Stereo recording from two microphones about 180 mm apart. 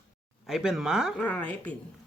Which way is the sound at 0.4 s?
Centre (ahead or behind).